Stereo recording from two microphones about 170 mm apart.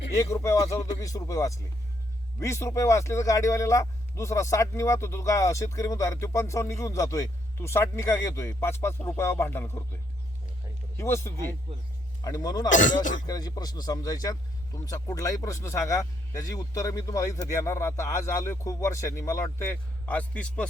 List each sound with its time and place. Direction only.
0.3 s speech: 15° left (ahead or behind)
12.6 s speech: 50° left (ahead or behind)
13.2 s speech: 20° left (ahead or behind)